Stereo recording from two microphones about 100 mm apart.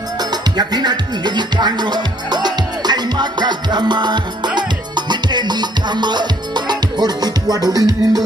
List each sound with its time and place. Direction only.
0.2 s music: 45° right (ahead or behind)